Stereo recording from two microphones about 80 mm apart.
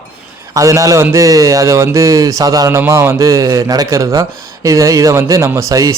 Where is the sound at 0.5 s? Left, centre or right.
Right.